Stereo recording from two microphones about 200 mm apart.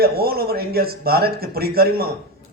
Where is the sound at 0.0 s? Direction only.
50° right (ahead or behind).